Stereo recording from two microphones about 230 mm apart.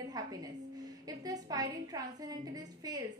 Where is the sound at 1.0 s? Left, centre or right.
Centre.